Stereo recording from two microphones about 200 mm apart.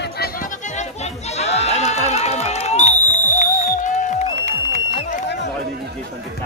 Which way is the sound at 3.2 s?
40° left (ahead or behind).